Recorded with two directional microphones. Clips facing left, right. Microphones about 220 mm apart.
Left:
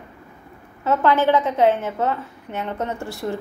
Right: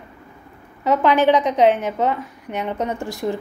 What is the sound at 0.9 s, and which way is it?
A woman's voice, 15° right (ahead or behind).